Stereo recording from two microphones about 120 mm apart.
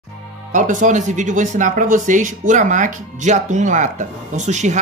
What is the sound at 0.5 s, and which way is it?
Speech, 90° right.